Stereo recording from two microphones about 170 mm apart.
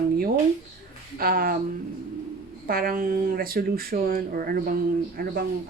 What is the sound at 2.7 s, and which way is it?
A woman's voice, 60° right (ahead or behind).